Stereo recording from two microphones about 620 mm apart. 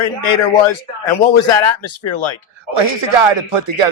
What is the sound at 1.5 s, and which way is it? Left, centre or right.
Speech, left.